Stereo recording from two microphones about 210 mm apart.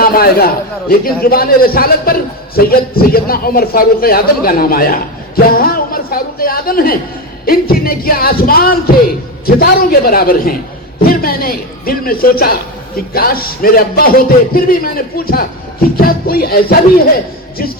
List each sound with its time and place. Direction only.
0.0 s a man's voice: 45° left (ahead or behind)